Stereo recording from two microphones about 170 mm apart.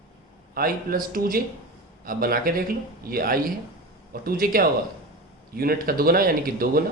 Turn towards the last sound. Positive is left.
turn(degrees=-60)  # may be behind; listen again after turning